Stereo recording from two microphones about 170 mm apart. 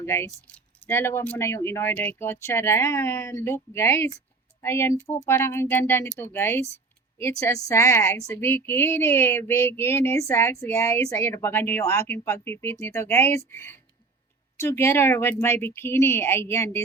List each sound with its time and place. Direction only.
0.0 s speech: 15° left (ahead or behind)